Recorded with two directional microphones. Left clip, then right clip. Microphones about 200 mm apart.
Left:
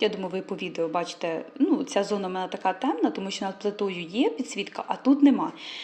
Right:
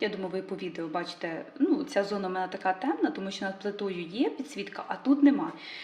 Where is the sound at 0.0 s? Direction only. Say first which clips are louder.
Left 5 dB; 30° left (ahead or behind).